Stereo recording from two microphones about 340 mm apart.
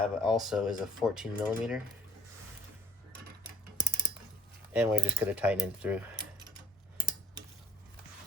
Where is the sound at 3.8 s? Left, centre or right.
Right.